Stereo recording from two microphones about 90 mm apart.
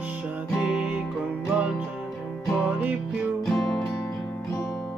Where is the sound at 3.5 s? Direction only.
5° left (ahead or behind).